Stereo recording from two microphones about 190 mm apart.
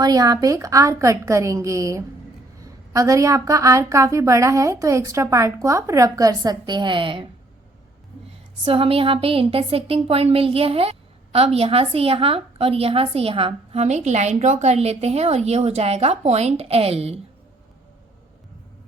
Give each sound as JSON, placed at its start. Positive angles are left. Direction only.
{"t": 0.0, "sound": "a woman's voice", "side_deg": -20}
{"t": 8.6, "sound": "a woman's voice", "side_deg": -30}